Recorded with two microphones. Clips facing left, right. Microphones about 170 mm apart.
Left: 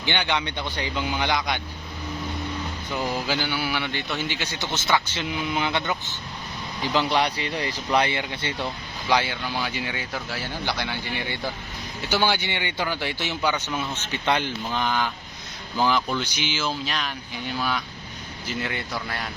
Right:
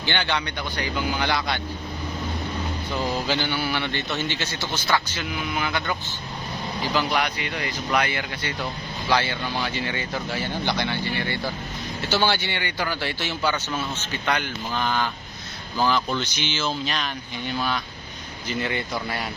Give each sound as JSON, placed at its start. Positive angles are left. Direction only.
{"t": 0.0, "sound": "a man's voice", "side_deg": 15}
{"t": 3.2, "sound": "a man's voice", "side_deg": 10}
{"t": 6.9, "sound": "a man's voice", "side_deg": 30}